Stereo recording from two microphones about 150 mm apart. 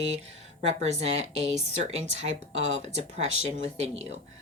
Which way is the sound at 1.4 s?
45° right (ahead or behind).